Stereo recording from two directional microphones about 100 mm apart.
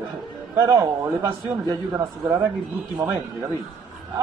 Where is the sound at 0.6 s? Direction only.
30° right (ahead or behind).